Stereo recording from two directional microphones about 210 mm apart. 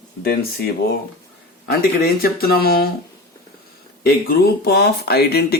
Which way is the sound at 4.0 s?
45° left (ahead or behind).